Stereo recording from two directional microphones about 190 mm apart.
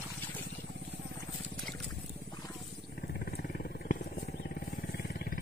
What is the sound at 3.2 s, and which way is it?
Wild animals, 55° left (ahead or behind).